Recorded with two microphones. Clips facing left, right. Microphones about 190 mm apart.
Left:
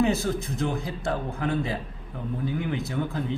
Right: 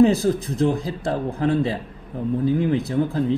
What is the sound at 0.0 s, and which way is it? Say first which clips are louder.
A man's voice: right 8 dB; 35° right (ahead or behind).